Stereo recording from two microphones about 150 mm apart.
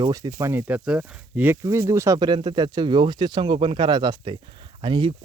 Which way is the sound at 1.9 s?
20° right (ahead or behind).